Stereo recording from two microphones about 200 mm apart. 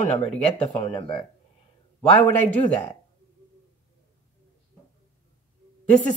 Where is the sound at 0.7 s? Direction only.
30° left (ahead or behind).